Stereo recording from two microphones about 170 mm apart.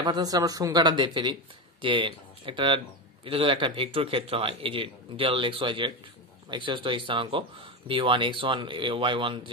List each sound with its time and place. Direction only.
0.0 s speech: 25° right (ahead or behind)